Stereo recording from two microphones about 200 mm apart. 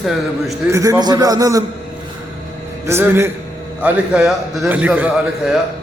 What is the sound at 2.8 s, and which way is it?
A man's voice, 10° right (ahead or behind).